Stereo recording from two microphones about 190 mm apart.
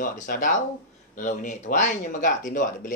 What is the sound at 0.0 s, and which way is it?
Speech, 45° left (ahead or behind).